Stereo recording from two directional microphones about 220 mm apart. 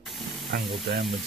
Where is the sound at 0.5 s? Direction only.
45° right (ahead or behind).